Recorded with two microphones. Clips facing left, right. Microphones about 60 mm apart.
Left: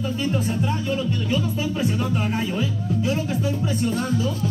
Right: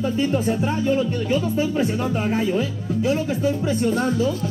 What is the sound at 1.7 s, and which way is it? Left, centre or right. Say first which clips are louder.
Music: right 2 dB; right.